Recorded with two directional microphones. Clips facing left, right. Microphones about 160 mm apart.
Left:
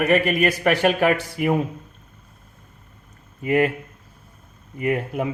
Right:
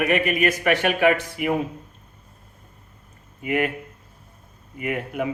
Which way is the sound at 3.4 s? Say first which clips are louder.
Left 4 dB; 35° left (ahead or behind).